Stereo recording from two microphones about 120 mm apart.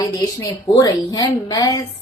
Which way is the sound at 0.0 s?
25° left (ahead or behind).